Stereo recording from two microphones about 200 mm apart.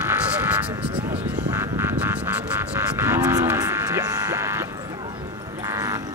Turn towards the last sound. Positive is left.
turn(degrees=-15)  # may be behind; listen again after turning